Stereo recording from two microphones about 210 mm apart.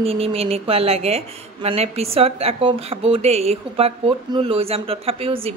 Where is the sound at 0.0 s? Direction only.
25° right (ahead or behind).